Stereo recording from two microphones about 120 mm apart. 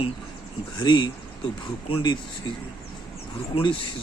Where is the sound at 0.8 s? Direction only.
40° left (ahead or behind).